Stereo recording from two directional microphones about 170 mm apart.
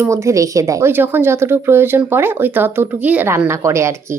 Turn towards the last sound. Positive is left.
turn(degrees=-15)  # may be behind; listen again after turning